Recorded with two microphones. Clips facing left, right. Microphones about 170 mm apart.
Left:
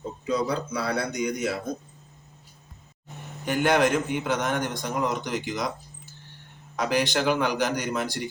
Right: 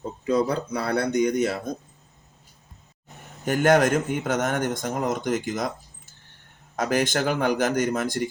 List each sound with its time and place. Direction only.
0.3 s speech: 55° right (ahead or behind)
3.4 s a man's voice: 45° right (ahead or behind)
6.7 s a man's voice: 45° right (ahead or behind)